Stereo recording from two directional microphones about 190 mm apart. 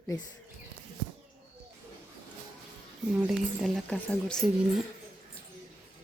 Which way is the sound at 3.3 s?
Centre (ahead or behind).